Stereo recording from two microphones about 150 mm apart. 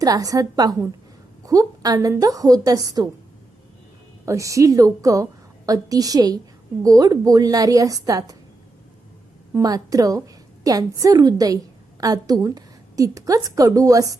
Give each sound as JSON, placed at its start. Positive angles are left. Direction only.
{"t": 0.0, "sound": "a woman's voice", "side_deg": -25}
{"t": 4.3, "sound": "a woman's voice", "side_deg": -20}
{"t": 9.5, "sound": "a woman's voice", "side_deg": -20}